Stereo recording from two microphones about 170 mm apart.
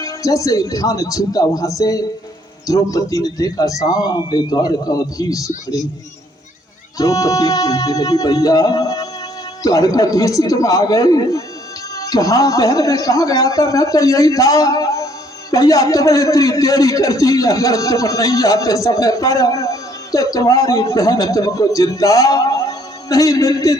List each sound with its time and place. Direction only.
0.0 s a man's voice: 20° left (ahead or behind)
7.0 s a man's voice: 20° left (ahead or behind)